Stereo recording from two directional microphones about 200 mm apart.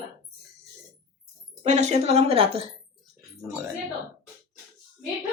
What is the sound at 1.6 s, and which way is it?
A woman's voice, 35° right (ahead or behind).